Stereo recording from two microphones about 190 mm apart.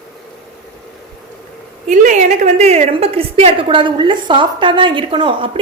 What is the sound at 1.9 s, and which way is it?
A woman's voice, 40° right (ahead or behind).